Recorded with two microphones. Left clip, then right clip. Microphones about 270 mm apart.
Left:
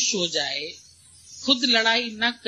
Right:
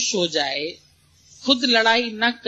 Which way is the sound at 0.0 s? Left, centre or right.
Left.